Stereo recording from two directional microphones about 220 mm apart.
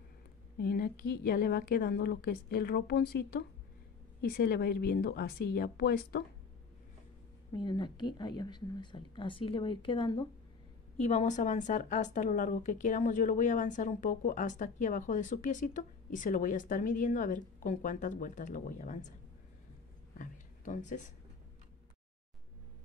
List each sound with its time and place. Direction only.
0.6 s a woman's voice: 45° left (ahead or behind)
7.5 s a woman's voice: 20° left (ahead or behind)
20.2 s a sound: 35° left (ahead or behind)